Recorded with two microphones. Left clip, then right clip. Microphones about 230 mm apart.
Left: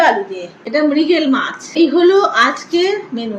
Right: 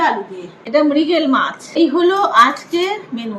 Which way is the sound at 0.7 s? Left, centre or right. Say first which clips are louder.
Even; right.